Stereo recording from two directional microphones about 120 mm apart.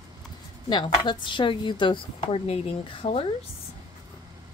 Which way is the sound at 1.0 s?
40° left (ahead or behind).